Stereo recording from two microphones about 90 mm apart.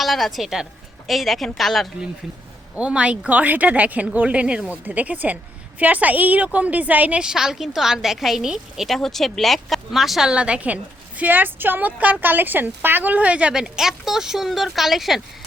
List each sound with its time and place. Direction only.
0.0 s a woman's voice: centre (ahead or behind)
2.7 s a woman's voice: 15° right (ahead or behind)